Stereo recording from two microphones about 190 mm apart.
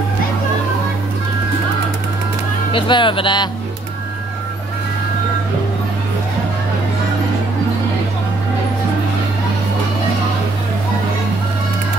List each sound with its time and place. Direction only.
2.7 s speech: 25° left (ahead or behind)